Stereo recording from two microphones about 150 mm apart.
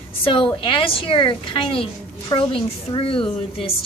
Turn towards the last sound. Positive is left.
turn(degrees=40)  # may be behind; listen again after turning